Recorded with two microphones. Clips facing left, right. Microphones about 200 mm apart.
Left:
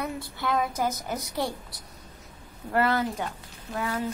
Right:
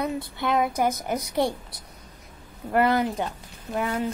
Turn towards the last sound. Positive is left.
turn(degrees=-20)  # may be behind; listen again after turning